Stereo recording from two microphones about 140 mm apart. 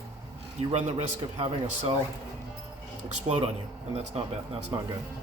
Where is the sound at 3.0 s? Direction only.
55° right (ahead or behind).